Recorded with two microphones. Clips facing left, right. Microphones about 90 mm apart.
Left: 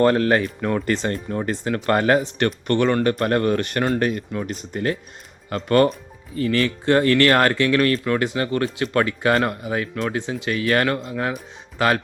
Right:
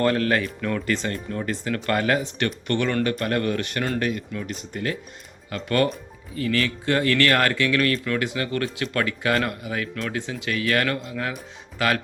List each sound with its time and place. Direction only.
0.0 s speech: 30° left (ahead or behind)